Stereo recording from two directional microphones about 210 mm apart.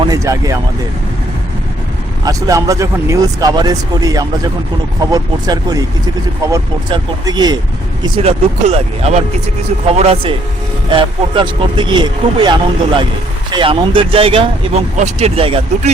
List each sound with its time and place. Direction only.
0.0 s speech: 15° right (ahead or behind)
2.2 s speech: 15° right (ahead or behind)